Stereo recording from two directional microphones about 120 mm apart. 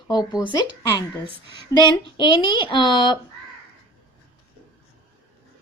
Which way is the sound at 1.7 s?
35° left (ahead or behind).